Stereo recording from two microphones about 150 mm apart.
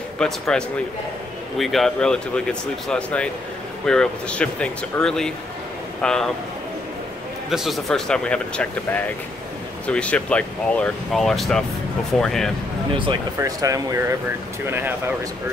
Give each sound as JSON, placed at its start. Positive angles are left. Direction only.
{"t": 0.2, "sound": "speech", "side_deg": 5}
{"t": 7.4, "sound": "speech", "side_deg": 0}
{"t": 13.4, "sound": "speech", "side_deg": -25}